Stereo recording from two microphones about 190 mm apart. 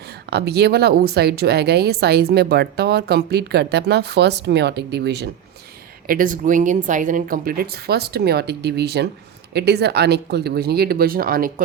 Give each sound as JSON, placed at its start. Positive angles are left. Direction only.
{"t": 0.3, "sound": "speech", "side_deg": -60}
{"t": 6.1, "sound": "speech", "side_deg": -45}